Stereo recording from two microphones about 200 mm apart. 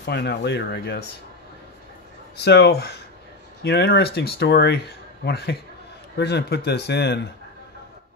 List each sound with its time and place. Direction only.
0.0 s speech: 55° left (ahead or behind)
2.3 s speech: 55° left (ahead or behind)